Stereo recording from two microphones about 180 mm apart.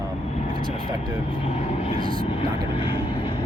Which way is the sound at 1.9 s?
30° left (ahead or behind).